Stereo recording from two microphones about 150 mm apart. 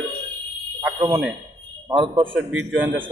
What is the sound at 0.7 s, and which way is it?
Fire alarm, 25° right (ahead or behind).